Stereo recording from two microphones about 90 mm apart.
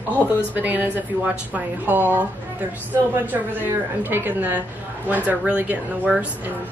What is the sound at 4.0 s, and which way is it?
A woman's voice, 20° right (ahead or behind).